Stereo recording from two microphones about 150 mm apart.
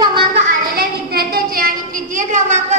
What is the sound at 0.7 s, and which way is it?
A woman's voice, 90° right.